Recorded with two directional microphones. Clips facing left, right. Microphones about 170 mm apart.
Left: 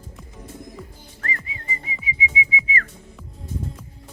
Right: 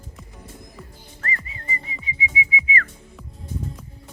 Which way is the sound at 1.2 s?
Centre (ahead or behind).